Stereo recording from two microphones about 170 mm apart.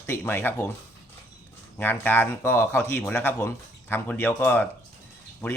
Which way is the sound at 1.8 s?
10° left (ahead or behind).